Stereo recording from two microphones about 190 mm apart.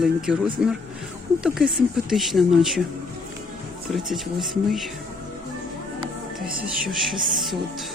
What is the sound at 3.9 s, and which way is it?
Speech, centre (ahead or behind).